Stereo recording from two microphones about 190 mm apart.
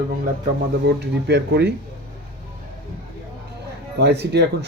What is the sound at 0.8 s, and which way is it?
Speech, 65° right (ahead or behind).